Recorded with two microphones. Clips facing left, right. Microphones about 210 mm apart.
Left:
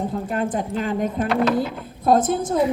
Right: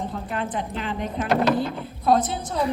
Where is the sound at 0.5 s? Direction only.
45° left (ahead or behind).